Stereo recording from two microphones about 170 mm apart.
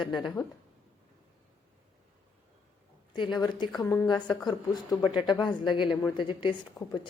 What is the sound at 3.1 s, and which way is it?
Speech, 25° left (ahead or behind).